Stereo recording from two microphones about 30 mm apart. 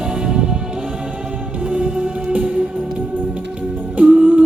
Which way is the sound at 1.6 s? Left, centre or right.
Right.